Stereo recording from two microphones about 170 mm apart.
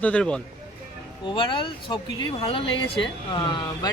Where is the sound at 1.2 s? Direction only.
30° left (ahead or behind).